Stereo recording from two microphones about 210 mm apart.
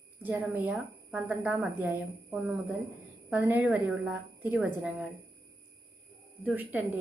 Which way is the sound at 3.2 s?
5° right (ahead or behind).